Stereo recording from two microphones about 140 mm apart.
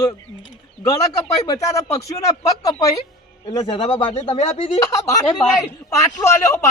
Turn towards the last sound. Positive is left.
turn(degrees=20)  # may be behind; listen again after turning